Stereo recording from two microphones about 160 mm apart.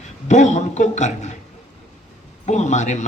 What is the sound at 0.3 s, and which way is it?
A man's voice, 50° left (ahead or behind).